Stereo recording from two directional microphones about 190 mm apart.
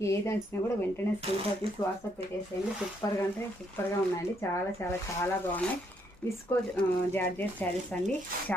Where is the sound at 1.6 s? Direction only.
30° right (ahead or behind).